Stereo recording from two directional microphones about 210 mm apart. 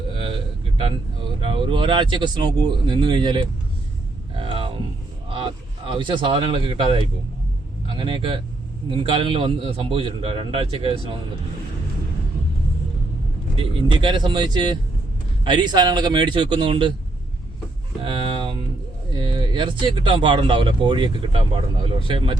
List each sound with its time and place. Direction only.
1.4 s speech: 25° right (ahead or behind)
4.4 s a sound: 25° right (ahead or behind)
5.3 s speech: 25° right (ahead or behind)
13.6 s speech: 25° right (ahead or behind)
18.0 s a sound: 25° right (ahead or behind)
19.1 s speech: 20° right (ahead or behind)